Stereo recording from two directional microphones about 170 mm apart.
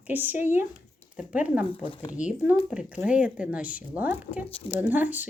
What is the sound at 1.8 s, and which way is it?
Speech, 30° left (ahead or behind).